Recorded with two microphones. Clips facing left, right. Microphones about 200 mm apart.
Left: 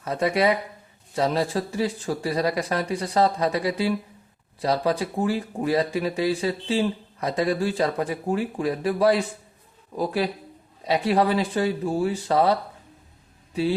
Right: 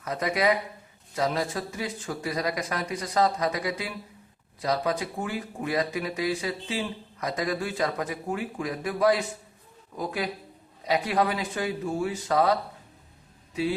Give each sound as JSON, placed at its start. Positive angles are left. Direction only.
{"t": 0.0, "sound": "speech", "side_deg": 30}